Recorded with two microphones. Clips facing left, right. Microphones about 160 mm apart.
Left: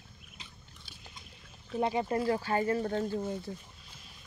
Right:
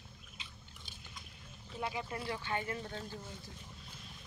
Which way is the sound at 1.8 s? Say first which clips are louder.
Left 10 dB; 45° left (ahead or behind).